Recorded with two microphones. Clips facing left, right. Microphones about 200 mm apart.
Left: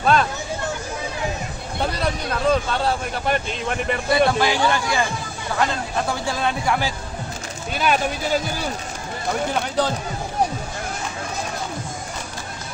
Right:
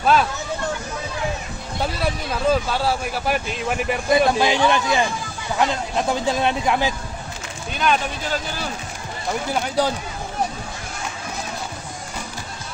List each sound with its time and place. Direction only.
0.0 s hubbub: 5° right (ahead or behind)
2.5 s a man's voice: 5° right (ahead or behind)
4.3 s speech: 20° right (ahead or behind)
7.8 s speech: 10° left (ahead or behind)
9.8 s speech: 10° right (ahead or behind)